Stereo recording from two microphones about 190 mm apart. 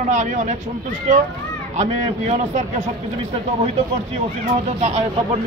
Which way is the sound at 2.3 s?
40° right (ahead or behind).